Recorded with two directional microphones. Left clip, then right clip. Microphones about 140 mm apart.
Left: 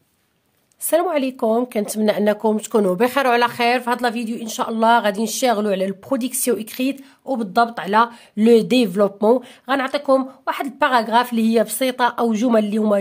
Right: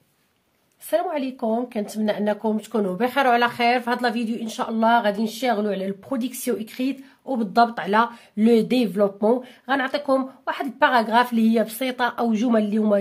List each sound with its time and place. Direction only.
0.8 s a woman's voice: 55° left (ahead or behind)
6.0 s speech: 35° left (ahead or behind)
7.3 s speech: 25° left (ahead or behind)